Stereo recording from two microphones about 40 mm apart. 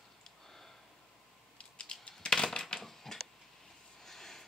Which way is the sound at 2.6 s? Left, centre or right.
Centre.